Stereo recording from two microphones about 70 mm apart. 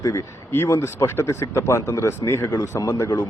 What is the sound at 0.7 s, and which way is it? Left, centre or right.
Speech, left.